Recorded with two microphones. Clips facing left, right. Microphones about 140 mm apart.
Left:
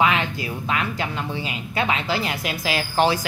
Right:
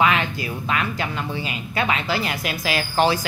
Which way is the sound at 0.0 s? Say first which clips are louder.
Right 1 dB; 20° left (ahead or behind).